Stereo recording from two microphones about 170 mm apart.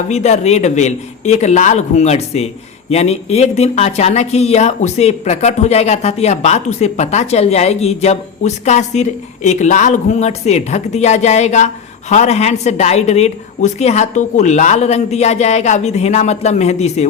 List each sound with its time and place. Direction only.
0.1 s speech: 40° left (ahead or behind)